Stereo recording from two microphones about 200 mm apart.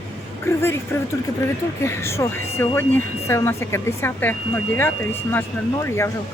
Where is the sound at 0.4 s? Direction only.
10° left (ahead or behind).